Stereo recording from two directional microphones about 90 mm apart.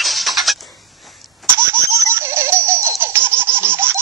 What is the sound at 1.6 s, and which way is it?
Baby laughter, 25° right (ahead or behind).